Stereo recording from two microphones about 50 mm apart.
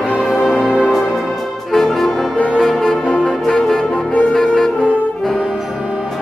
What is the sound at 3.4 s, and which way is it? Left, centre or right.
Brass instrument, centre.